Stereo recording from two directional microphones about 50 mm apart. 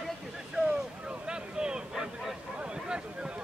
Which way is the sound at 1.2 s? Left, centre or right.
Centre.